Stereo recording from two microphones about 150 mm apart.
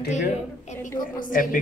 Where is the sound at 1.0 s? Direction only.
65° left (ahead or behind).